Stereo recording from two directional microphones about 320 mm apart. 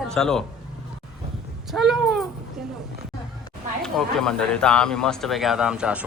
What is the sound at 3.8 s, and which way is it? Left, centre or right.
Speech, centre.